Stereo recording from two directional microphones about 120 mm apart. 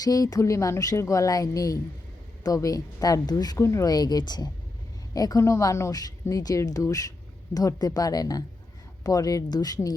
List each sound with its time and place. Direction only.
0.0 s a woman's voice: 30° left (ahead or behind)